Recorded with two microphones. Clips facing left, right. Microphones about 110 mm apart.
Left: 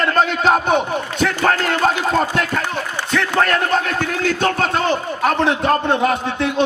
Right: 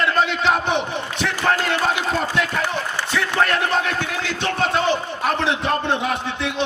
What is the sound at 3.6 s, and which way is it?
A man's voice, 45° left (ahead or behind).